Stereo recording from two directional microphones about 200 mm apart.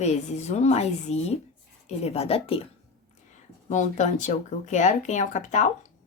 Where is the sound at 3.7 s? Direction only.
35° left (ahead or behind).